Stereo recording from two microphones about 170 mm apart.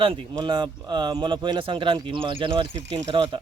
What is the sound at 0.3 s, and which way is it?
Speech, 25° right (ahead or behind).